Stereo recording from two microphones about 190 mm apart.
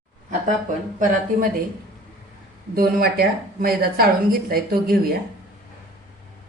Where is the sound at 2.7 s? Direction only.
50° right (ahead or behind).